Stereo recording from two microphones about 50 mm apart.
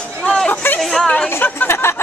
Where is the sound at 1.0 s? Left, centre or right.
Centre.